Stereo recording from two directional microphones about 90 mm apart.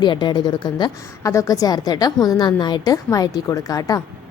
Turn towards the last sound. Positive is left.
turn(degrees=40)  # may be behind; listen again after turning